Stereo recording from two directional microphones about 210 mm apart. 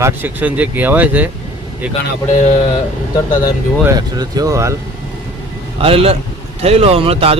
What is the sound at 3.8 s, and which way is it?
Speech, 15° right (ahead or behind).